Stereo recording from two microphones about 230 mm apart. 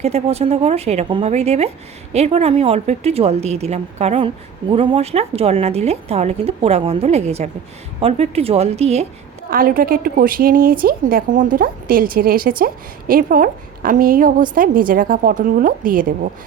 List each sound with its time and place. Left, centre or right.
0.0 s a woman's voice: right
9.5 s a woman's voice: right